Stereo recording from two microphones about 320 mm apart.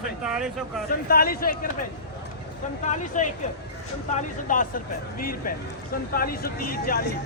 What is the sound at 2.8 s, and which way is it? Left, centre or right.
Speech, left.